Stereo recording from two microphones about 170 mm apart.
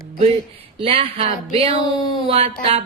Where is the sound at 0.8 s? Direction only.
35° right (ahead or behind).